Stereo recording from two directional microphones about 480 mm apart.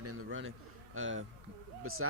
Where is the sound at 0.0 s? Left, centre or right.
Right.